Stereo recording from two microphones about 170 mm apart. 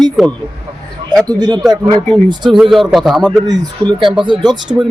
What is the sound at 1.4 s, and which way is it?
Speech, 25° right (ahead or behind).